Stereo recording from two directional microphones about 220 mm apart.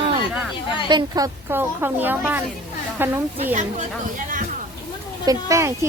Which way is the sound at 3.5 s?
35° right (ahead or behind).